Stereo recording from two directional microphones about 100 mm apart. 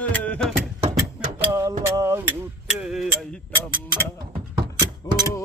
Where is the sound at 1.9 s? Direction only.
30° right (ahead or behind).